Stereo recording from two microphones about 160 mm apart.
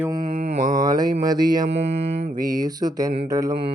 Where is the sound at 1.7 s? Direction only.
40° right (ahead or behind).